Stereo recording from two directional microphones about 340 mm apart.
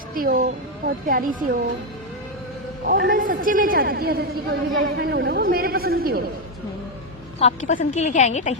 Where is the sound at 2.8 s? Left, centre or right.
Right.